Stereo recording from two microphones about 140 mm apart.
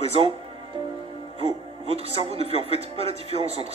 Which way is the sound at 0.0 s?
45° right (ahead or behind).